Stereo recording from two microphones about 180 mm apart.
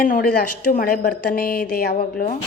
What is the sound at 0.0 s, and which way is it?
A woman's voice, 50° left (ahead or behind).